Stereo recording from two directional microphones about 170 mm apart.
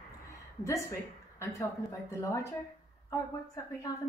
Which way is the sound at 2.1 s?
20° left (ahead or behind).